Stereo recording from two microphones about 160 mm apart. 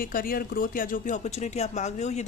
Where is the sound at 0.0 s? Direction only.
60° left (ahead or behind).